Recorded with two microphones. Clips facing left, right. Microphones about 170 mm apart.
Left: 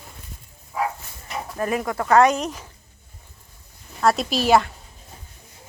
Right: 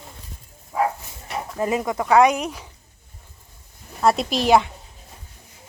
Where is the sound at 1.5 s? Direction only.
20° right (ahead or behind).